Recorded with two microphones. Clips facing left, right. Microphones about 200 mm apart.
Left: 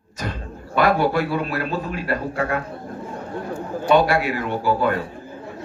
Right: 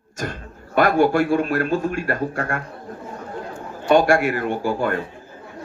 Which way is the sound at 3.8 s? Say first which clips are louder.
Right 2 dB; 50° right (ahead or behind).